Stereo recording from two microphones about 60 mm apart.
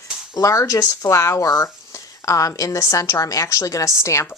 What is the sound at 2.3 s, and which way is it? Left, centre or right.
A woman's voice, left.